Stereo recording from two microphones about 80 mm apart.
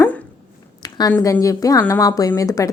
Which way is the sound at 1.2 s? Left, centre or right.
Left.